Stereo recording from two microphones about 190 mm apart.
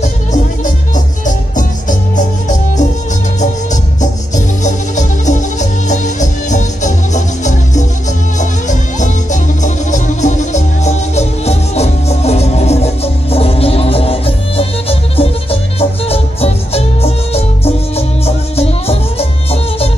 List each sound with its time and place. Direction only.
0.9 s music: 40° left (ahead or behind)
4.6 s music: 40° left (ahead or behind)